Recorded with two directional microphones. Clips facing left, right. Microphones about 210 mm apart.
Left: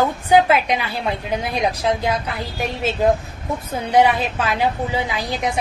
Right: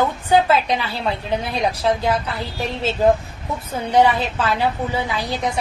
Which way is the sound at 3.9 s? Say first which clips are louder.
Even; 15° left (ahead or behind).